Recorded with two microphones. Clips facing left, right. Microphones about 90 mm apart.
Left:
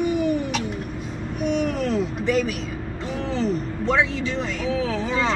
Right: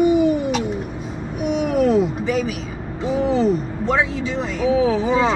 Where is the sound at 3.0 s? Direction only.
10° right (ahead or behind).